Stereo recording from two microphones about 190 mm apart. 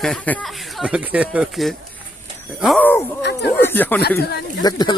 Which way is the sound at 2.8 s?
10° left (ahead or behind).